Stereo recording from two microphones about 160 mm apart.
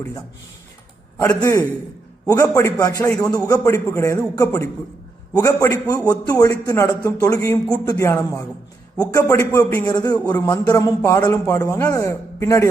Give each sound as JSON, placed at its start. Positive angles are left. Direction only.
{"t": 1.2, "sound": "a man's voice", "side_deg": 20}